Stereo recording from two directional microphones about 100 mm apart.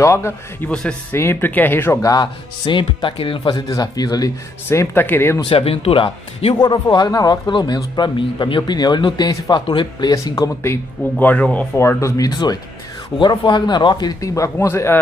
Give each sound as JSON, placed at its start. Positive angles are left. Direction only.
{"t": 0.0, "sound": "speech", "side_deg": 25}
{"t": 2.0, "sound": "speech", "side_deg": 35}
{"t": 2.6, "sound": "speech", "side_deg": 55}
{"t": 3.6, "sound": "speech", "side_deg": 40}
{"t": 4.6, "sound": "speech", "side_deg": 20}
{"t": 5.4, "sound": "speech", "side_deg": 70}
{"t": 6.5, "sound": "a man's voice", "side_deg": 45}
{"t": 10.1, "sound": "speech", "side_deg": 35}
{"t": 10.6, "sound": "a man's voice", "side_deg": 20}
{"t": 14.2, "sound": "speech", "side_deg": 30}